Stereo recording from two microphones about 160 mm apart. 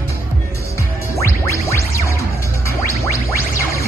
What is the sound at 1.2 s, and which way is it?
Music, 15° left (ahead or behind).